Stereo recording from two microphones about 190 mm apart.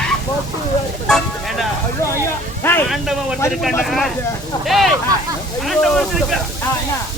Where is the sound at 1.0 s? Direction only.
Centre (ahead or behind).